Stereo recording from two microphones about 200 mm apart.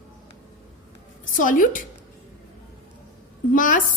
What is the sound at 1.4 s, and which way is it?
Speech, 40° left (ahead or behind).